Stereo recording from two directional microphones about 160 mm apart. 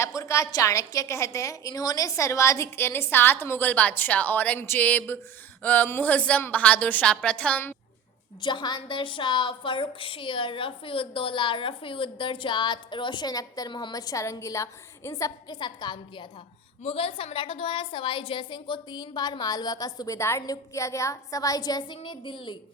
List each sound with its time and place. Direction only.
0.2 s a woman's voice: 20° left (ahead or behind)
8.4 s a woman's voice: 30° left (ahead or behind)